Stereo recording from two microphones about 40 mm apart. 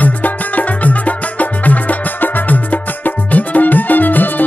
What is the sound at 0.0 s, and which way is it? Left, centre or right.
Music, left.